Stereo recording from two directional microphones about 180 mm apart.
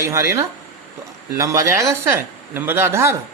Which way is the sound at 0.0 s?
15° right (ahead or behind).